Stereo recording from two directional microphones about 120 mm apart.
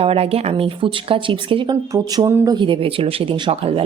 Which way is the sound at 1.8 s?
30° right (ahead or behind).